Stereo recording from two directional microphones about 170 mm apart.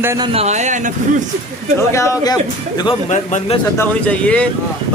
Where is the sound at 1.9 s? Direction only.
15° left (ahead or behind).